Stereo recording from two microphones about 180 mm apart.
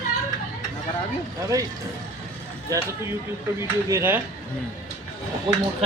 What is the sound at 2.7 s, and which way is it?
Speech, 20° right (ahead or behind).